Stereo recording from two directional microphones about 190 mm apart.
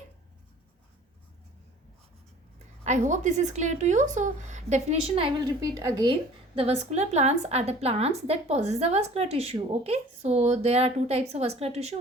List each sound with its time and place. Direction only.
2.8 s a woman's voice: 40° right (ahead or behind); by 6.1 s 20° right (ahead or behind)
6.6 s a woman's voice: 35° right (ahead or behind)